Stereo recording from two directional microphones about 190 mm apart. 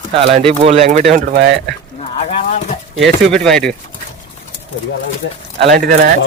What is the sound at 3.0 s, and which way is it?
Speech, centre (ahead or behind).